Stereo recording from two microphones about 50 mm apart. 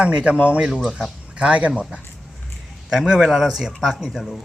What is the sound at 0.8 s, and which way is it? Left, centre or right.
Speech, centre.